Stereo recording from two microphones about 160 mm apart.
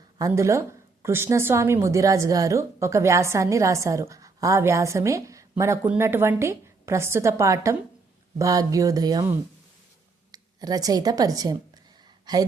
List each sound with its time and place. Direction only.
0.2 s a woman's voice: 20° right (ahead or behind)
10.3 s a woman's voice: 25° right (ahead or behind)